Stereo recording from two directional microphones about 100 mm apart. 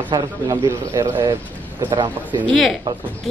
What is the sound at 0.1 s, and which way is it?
Speech, 45° right (ahead or behind).